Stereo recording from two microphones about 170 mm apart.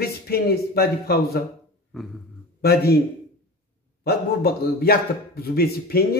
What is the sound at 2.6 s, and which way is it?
Speech, 70° left (ahead or behind).